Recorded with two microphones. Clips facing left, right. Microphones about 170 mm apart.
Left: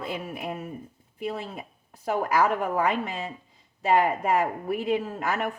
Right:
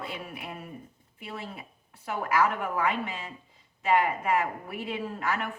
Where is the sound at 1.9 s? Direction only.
40° left (ahead or behind).